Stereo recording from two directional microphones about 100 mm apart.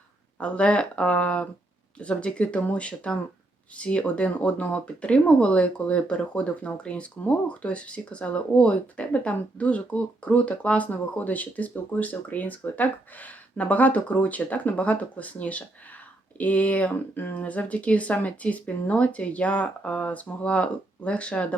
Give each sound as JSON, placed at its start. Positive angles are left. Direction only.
{"t": 0.3, "sound": "speech", "side_deg": 10}